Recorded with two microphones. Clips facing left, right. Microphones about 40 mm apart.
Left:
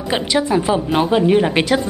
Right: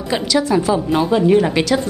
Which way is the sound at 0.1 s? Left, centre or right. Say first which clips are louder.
Right 1 dB; left.